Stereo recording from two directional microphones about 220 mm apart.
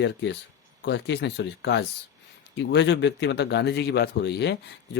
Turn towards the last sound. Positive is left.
turn(degrees=50)  # may be behind; listen again after turning